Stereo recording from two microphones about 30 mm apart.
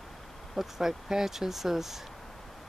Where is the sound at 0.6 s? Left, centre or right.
Centre.